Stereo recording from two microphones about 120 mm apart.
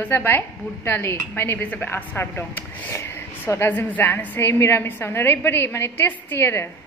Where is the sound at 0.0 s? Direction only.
20° left (ahead or behind).